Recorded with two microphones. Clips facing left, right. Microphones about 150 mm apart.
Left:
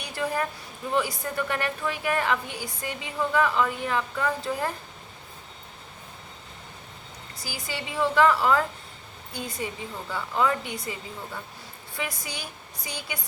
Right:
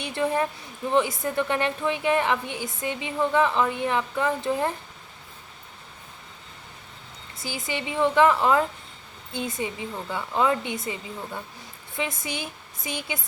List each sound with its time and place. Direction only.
0.0 s a woman's voice: 25° right (ahead or behind)
7.3 s a woman's voice: 25° right (ahead or behind)
11.9 s a woman's voice: 25° right (ahead or behind)